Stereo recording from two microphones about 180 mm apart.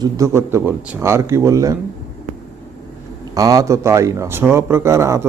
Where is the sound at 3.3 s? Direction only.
20° right (ahead or behind).